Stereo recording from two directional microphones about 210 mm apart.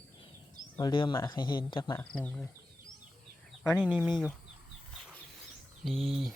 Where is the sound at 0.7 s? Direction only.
20° left (ahead or behind).